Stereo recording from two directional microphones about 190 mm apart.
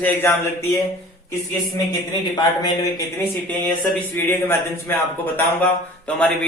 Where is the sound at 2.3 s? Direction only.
20° left (ahead or behind).